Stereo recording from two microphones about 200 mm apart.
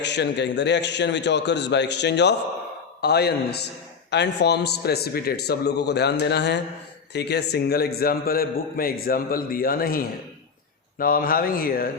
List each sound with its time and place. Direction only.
0.0 s a man's voice: 60° left (ahead or behind)